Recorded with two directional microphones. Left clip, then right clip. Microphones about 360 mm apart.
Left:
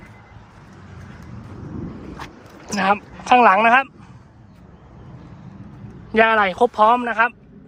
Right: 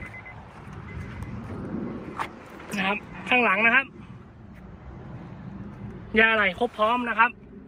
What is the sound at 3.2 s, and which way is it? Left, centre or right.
Speech, left.